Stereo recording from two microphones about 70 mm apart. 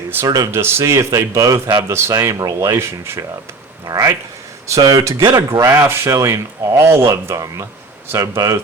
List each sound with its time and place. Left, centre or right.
0.3 s a man's voice: right
2.2 s a man's voice: right
3.8 s a man's voice: right
5.9 s a man's voice: right